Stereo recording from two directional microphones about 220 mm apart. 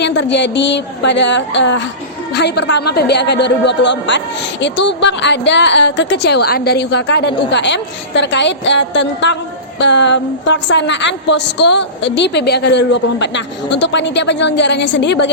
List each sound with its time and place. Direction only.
0.0 s a woman's voice: 55° left (ahead or behind)